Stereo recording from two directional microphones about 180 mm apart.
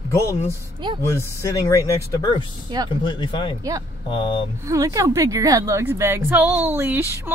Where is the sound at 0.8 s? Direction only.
25° right (ahead or behind).